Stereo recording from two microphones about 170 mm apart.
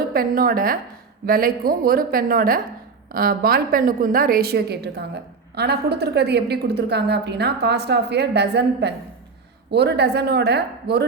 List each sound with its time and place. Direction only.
0.1 s a woman's voice: 60° right (ahead or behind); by 11.0 s 75° right (ahead or behind)